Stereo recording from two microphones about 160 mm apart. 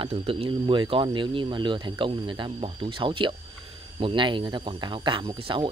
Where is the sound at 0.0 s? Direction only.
35° right (ahead or behind).